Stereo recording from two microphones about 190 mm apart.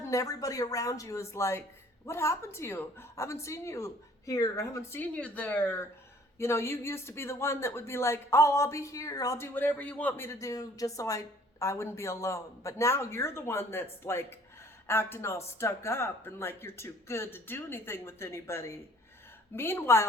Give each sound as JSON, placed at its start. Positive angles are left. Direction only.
{"t": 0.0, "sound": "speech", "side_deg": 15}